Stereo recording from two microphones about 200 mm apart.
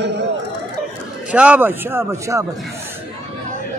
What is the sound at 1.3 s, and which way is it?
Speech, 5° right (ahead or behind).